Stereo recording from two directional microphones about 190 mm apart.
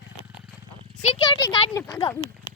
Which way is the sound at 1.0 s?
30° left (ahead or behind).